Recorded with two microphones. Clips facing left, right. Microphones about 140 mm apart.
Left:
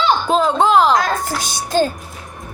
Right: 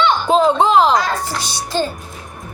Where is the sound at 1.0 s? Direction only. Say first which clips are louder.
Left 1 dB; 45° left (ahead or behind).